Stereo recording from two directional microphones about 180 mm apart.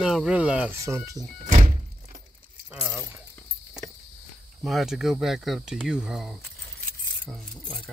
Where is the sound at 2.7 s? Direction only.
10° right (ahead or behind).